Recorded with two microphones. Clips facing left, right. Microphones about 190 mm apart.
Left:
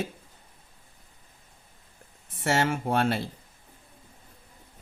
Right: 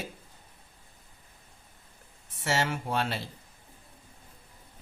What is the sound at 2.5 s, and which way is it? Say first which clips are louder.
Speech: left 4 dB; 50° left (ahead or behind).